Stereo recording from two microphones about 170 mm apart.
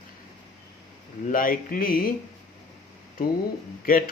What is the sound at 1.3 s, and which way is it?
Speech, 55° left (ahead or behind).